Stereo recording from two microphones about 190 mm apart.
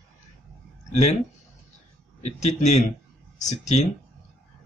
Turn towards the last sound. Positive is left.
turn(degrees=35)  # may be behind; listen again after turning